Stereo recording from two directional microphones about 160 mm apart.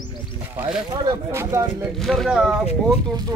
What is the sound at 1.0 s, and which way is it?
Speech, 20° right (ahead or behind).